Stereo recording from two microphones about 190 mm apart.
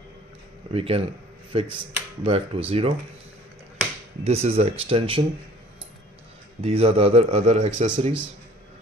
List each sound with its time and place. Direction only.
0.7 s a man's voice: 30° right (ahead or behind)
4.2 s a man's voice: 30° right (ahead or behind)
6.6 s a man's voice: 30° right (ahead or behind)